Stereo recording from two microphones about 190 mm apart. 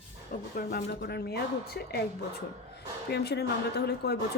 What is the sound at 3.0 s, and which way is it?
Speech, 60° left (ahead or behind).